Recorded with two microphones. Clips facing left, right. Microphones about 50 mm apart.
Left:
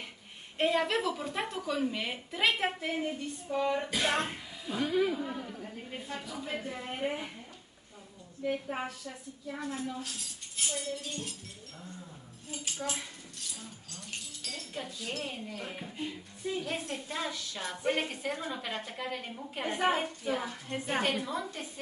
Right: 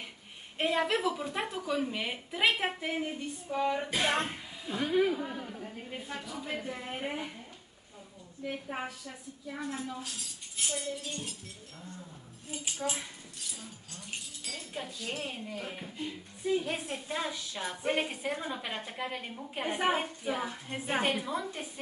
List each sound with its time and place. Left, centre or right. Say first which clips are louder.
0.6 s a woman's voice: left 1 dB; centre
4.8 s a woman's voice: right 2 dB; right
5.1 s a woman's voice: even; centre
8.5 s a woman's voice: left 3 dB; centre
12.4 s a woman's voice: right 1 dB; centre
14.5 s a woman's voice: right 1 dB; centre